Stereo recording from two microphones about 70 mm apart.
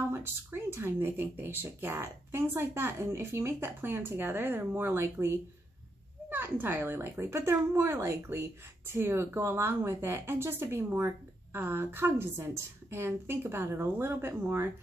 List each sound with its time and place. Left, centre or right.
0.1 s speech: right